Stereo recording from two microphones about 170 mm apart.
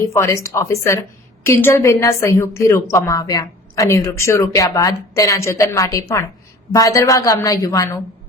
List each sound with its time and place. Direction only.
0.0 s a woman's voice: 15° left (ahead or behind)